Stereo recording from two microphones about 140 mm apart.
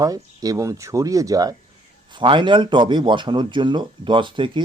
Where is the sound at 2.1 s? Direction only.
35° right (ahead or behind).